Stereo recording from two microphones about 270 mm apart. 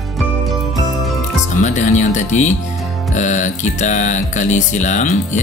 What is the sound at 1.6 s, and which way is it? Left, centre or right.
Speech, left.